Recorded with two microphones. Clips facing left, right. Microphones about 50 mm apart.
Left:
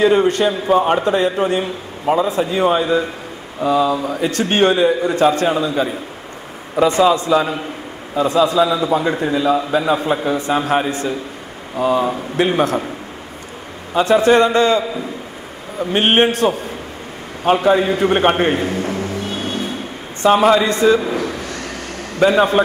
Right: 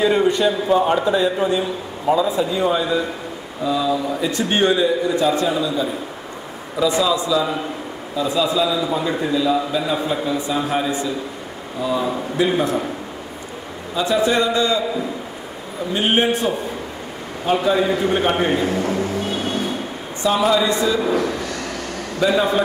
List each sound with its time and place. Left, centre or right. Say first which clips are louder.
0.0 s a man's voice: left 3 dB; left
13.9 s a man's voice: left 6 dB; left
15.8 s a man's voice: left 4 dB; left
17.5 s a man's voice: left 4 dB; left
18.9 s vehicle: right 1 dB; left
20.2 s a man's voice: left 5 dB; left
22.2 s a man's voice: left 4 dB; left